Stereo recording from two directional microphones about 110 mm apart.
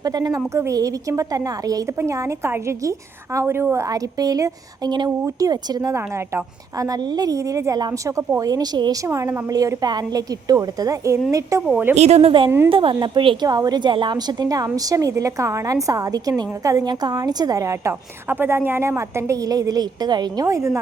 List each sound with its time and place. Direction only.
0.0 s a woman's voice: 35° right (ahead or behind)
7.8 s a woman's voice: 40° right (ahead or behind)
8.1 s a woman's voice: 30° right (ahead or behind)
9.0 s a woman's voice: 25° right (ahead or behind)
11.7 s a woman's voice: 20° right (ahead or behind)
11.9 s a woman's voice: 75° right (ahead or behind)
12.5 s a woman's voice: 20° right (ahead or behind)
12.7 s a woman's voice: 50° right (ahead or behind); by 20.7 s 25° right (ahead or behind)